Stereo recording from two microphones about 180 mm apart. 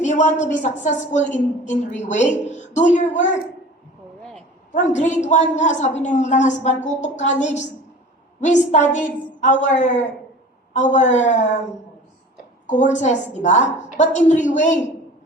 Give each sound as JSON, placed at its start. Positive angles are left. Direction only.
{"t": 0.0, "sound": "a woman's voice", "side_deg": 40}
{"t": 4.7, "sound": "a woman's voice", "side_deg": 40}
{"t": 12.6, "sound": "a woman's voice", "side_deg": 40}